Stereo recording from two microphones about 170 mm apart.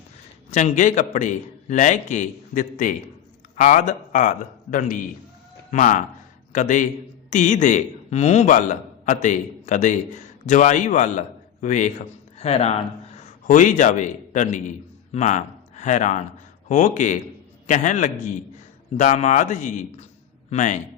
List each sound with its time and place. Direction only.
0.5 s a man's voice: 45° left (ahead or behind)
13.5 s a man's voice: 50° left (ahead or behind)